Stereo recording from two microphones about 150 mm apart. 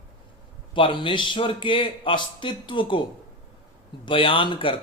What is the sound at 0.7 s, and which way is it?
Speech, 35° left (ahead or behind).